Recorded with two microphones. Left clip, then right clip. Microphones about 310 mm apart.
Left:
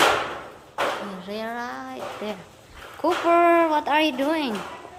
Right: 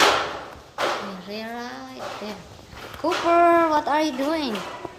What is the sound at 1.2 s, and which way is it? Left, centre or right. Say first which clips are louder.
A woman's voice: left 2 dB; centre.